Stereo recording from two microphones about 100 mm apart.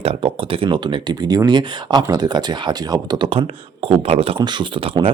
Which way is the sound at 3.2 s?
70° right (ahead or behind).